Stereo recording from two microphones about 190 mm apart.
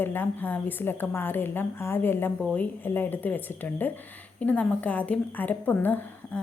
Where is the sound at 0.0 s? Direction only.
10° left (ahead or behind).